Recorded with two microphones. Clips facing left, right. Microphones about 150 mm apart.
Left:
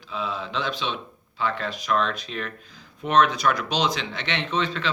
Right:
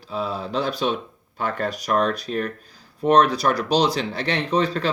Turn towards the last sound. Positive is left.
turn(degrees=-40)  # may be behind; listen again after turning